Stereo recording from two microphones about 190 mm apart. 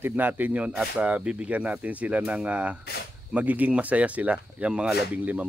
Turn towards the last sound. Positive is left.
turn(degrees=-10)  # may be behind; listen again after turning